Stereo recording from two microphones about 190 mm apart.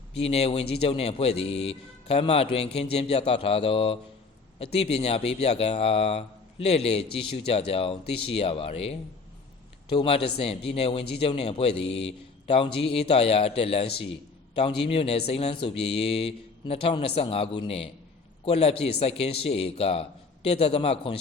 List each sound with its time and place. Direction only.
0.1 s speech: 30° left (ahead or behind)